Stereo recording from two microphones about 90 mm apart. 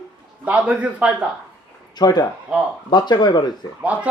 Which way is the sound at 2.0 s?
50° left (ahead or behind).